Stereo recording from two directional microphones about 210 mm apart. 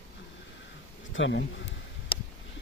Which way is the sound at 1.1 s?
60° left (ahead or behind).